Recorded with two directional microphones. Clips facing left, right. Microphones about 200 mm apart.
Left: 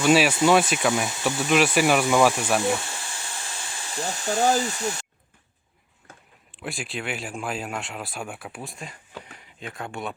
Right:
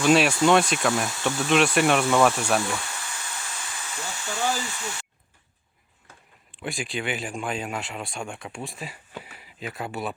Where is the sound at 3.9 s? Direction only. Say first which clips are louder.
Left 8 dB; 40° left (ahead or behind).